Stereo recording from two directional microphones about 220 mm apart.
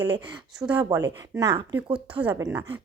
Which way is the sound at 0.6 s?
5° right (ahead or behind).